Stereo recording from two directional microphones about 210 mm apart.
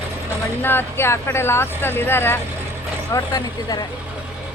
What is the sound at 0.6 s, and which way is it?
Speech, 10° left (ahead or behind).